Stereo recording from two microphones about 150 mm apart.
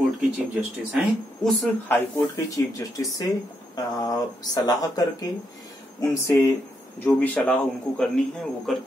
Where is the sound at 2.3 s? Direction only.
20° left (ahead or behind).